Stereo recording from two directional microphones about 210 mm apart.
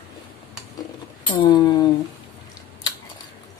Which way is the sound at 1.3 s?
20° left (ahead or behind).